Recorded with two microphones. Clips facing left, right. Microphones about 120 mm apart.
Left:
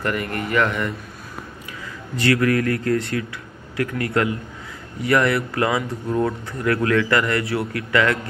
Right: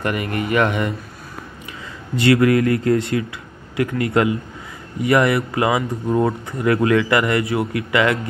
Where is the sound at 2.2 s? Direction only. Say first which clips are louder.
Right 4 dB; 20° right (ahead or behind).